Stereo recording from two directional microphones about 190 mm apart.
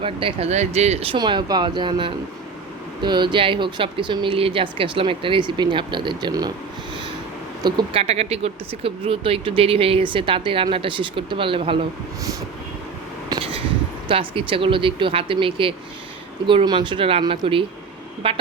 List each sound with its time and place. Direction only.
0.0 s speech: 30° right (ahead or behind)
7.6 s speech: 25° right (ahead or behind)
13.3 s a sound: 30° right (ahead or behind)
14.1 s speech: 25° right (ahead or behind)